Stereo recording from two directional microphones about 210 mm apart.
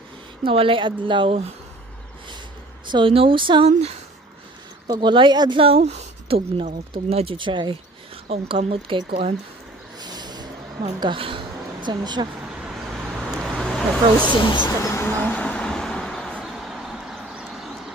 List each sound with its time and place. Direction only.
0.5 s speech: 25° right (ahead or behind)
2.9 s speech: 25° right (ahead or behind)
10.0 s a sound: 20° right (ahead or behind)
12.5 s vehicle: centre (ahead or behind)
14.2 s speech: 20° left (ahead or behind)
14.8 s vehicle: 15° left (ahead or behind)